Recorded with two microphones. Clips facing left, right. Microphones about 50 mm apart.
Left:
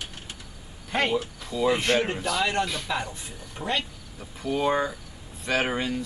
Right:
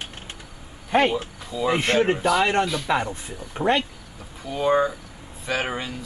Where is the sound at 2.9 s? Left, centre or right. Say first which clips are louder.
Right 6 dB; right.